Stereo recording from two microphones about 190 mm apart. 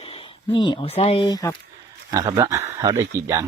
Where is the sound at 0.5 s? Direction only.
25° left (ahead or behind).